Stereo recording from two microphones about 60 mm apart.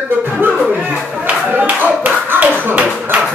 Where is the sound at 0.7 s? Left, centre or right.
Right.